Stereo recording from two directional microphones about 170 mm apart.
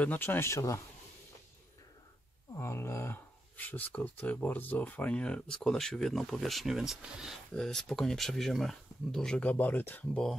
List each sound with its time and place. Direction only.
0.0 s speech: 10° left (ahead or behind)
2.5 s speech: 15° left (ahead or behind)